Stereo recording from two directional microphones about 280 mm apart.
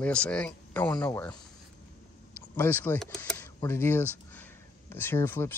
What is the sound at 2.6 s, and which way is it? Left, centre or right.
Speech, centre.